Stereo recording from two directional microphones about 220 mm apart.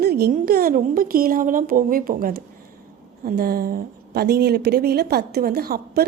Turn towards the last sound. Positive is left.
turn(degrees=-45)  # may be behind; listen again after turning